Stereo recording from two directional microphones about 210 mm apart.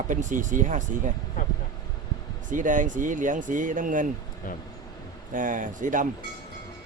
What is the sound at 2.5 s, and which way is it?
Speech, 35° right (ahead or behind).